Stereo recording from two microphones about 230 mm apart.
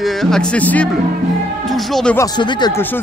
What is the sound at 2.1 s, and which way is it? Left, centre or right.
Speech, centre.